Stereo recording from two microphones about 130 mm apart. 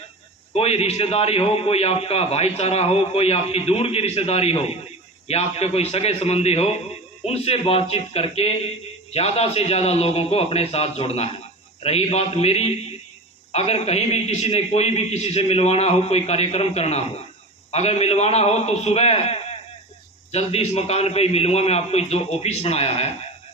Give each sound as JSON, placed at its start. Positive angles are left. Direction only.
{"t": 0.5, "sound": "a man's voice", "side_deg": 50}